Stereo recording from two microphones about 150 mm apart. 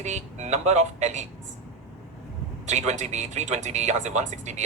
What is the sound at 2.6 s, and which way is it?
Speech, 50° right (ahead or behind).